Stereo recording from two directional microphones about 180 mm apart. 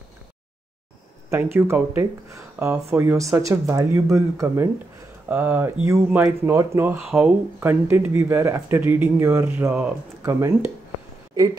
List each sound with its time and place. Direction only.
1.3 s speech: 10° right (ahead or behind)